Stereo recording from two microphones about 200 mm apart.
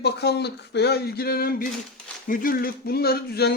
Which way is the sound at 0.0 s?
55° left (ahead or behind).